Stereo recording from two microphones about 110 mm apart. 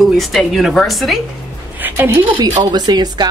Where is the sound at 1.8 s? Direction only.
20° right (ahead or behind).